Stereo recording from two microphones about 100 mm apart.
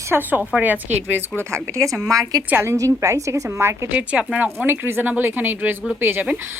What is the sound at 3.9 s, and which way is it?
A woman's voice, 15° right (ahead or behind).